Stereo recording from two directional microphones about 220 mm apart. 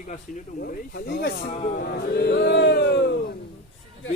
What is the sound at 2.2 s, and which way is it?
Speech, 50° left (ahead or behind).